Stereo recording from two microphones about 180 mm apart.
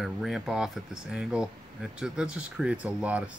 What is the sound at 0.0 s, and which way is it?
Speech, centre (ahead or behind).